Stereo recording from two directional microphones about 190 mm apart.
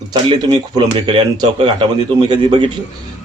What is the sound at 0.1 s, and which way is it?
Speech, 25° right (ahead or behind).